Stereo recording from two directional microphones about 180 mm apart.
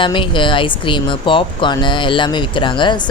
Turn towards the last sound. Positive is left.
turn(degrees=25)  # may be behind; listen again after turning